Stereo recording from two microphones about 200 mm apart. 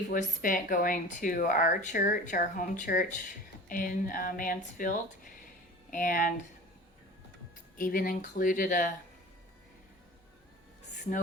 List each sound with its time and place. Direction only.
0.1 s speech: 40° left (ahead or behind)
7.8 s speech: 45° left (ahead or behind)